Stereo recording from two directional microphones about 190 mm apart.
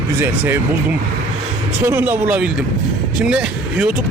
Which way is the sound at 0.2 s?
10° right (ahead or behind).